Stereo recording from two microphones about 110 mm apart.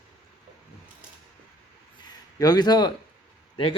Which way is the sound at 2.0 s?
40° left (ahead or behind).